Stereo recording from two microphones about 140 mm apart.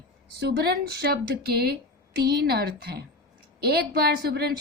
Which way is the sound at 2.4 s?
90° right.